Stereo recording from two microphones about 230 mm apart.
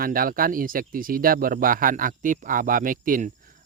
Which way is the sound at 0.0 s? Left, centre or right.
Right.